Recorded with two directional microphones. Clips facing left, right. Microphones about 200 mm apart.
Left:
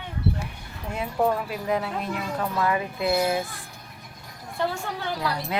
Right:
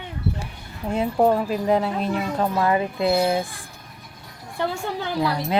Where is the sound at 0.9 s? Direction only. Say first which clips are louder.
Right 5 dB; 35° right (ahead or behind).